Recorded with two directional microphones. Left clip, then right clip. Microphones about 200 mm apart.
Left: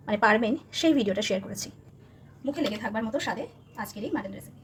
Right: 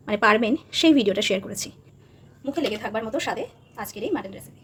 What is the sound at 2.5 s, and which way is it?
A woman's voice, 40° right (ahead or behind).